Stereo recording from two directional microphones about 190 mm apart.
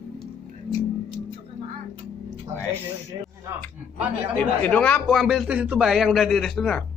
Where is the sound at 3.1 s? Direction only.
20° right (ahead or behind).